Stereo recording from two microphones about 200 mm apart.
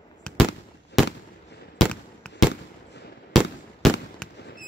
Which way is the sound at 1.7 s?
5° left (ahead or behind).